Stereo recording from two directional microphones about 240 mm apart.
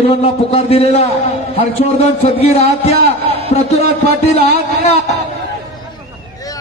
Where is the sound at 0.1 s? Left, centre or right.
Left.